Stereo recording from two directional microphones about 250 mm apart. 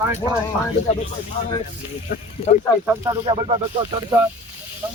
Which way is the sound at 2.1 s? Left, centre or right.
Left.